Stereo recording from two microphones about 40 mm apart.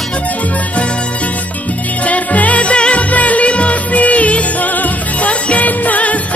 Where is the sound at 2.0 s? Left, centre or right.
Left.